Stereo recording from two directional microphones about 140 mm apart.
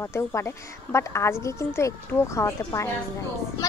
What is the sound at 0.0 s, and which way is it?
A woman's voice, 20° left (ahead or behind).